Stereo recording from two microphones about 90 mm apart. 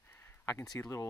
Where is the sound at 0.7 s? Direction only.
35° left (ahead or behind).